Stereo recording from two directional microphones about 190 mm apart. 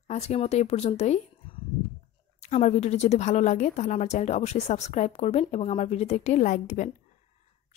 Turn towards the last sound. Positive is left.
turn(degrees=40)  # may be behind; listen again after turning